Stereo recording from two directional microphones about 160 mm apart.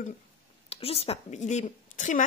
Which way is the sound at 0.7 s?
40° left (ahead or behind).